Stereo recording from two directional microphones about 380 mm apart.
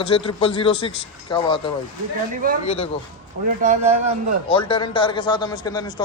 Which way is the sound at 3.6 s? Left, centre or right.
Centre.